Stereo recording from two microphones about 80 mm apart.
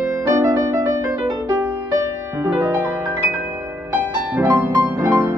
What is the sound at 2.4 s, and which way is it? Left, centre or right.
Music, right.